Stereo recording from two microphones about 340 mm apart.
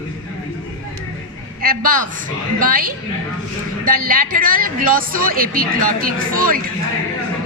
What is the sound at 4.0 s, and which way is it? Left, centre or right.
A woman's voice, right.